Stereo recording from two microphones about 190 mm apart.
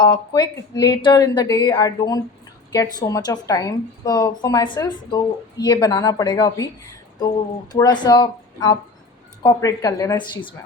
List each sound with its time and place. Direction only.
0.0 s a woman's voice: 25° left (ahead or behind)
7.7 s a woman's voice: 20° left (ahead or behind)